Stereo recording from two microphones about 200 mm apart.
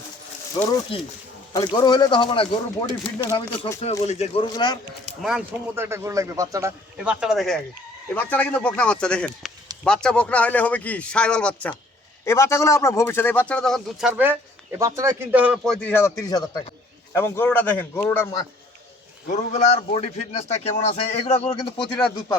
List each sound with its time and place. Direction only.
0.9 s a man's voice: 30° left (ahead or behind)
4.5 s speech: 20° left (ahead or behind)
5.2 s a man's voice: 5° right (ahead or behind)
14.1 s a man's voice: 10° right (ahead or behind); by 18.4 s 15° left (ahead or behind)
19.3 s a man's voice: 35° left (ahead or behind)